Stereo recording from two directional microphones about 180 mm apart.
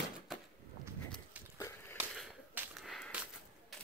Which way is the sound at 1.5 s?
15° left (ahead or behind).